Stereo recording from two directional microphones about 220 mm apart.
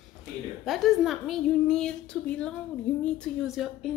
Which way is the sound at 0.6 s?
Centre (ahead or behind).